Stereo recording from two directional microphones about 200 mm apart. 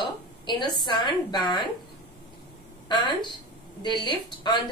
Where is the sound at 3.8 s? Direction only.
20° left (ahead or behind).